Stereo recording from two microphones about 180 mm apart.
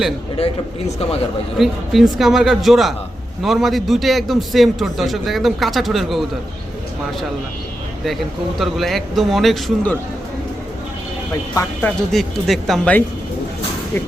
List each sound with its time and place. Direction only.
0.3 s a man's voice: 35° left (ahead or behind)
1.5 s a man's voice: centre (ahead or behind)
8.5 s a man's voice: centre (ahead or behind)
11.5 s a man's voice: 5° left (ahead or behind)